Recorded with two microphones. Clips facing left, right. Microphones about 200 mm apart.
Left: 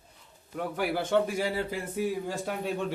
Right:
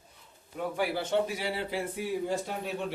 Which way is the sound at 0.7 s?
50° left (ahead or behind).